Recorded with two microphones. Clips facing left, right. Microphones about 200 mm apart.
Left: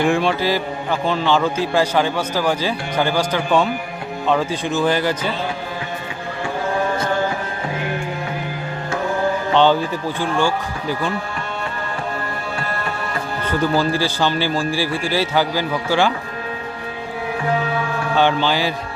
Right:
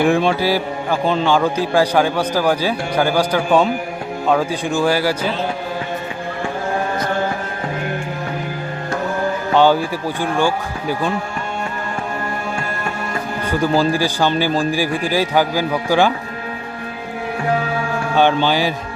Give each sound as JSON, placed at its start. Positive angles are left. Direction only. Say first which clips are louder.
{"t": 0.0, "sound": "a man's voice", "louder": "right 2 dB", "side_deg": -15}
{"t": 9.6, "sound": "a man's voice", "louder": "right 2 dB", "side_deg": -10}
{"t": 13.4, "sound": "a man's voice", "louder": "right 2 dB", "side_deg": -15}
{"t": 18.2, "sound": "a man's voice", "louder": "right 2 dB", "side_deg": -15}